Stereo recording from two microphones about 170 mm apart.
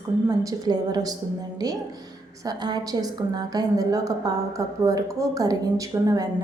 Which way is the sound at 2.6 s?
25° right (ahead or behind).